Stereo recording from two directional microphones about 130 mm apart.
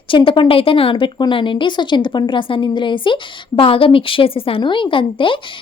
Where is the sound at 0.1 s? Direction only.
40° left (ahead or behind).